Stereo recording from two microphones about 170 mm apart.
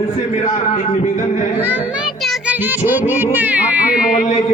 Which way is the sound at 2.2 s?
5° right (ahead or behind).